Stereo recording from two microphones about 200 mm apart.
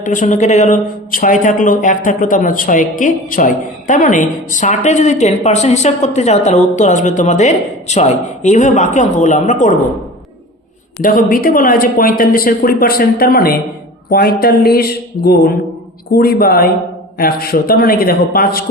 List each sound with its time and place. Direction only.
0.0 s speech: 40° left (ahead or behind)
11.0 s speech: 45° left (ahead or behind)